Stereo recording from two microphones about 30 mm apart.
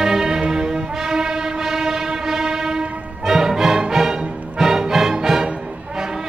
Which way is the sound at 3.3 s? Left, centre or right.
Centre.